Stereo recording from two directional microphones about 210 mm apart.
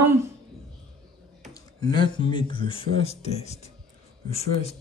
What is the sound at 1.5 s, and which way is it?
Speech, 20° left (ahead or behind).